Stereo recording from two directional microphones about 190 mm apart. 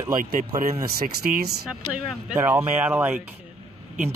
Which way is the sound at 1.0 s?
50° right (ahead or behind).